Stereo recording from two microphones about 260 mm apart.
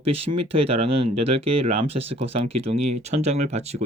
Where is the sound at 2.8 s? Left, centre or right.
Right.